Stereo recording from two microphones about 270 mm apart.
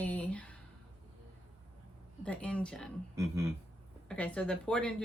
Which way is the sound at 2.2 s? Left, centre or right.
Centre.